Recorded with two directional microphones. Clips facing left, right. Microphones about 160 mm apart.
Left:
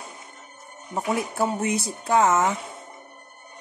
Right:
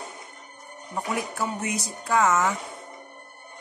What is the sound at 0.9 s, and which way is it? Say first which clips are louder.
Speech: left 4 dB; 30° left (ahead or behind).